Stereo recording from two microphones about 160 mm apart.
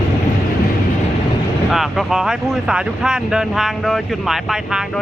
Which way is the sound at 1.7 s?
Centre (ahead or behind).